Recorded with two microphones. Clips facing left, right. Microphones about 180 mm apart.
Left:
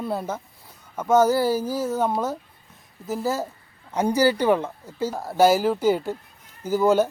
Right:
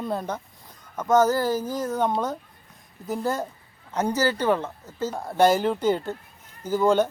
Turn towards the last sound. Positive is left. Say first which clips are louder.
# left 1 dB
turn(degrees=5)  # may be behind; listen again after turning